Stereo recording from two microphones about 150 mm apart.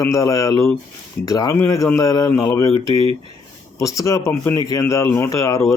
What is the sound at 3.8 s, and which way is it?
Speech, 20° left (ahead or behind).